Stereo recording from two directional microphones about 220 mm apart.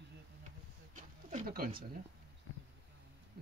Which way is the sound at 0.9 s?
40° right (ahead or behind).